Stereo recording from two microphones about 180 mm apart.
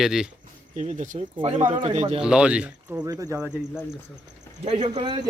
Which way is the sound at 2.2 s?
5° right (ahead or behind).